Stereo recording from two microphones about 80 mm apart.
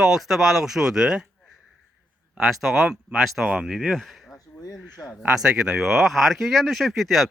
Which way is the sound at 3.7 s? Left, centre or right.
Centre.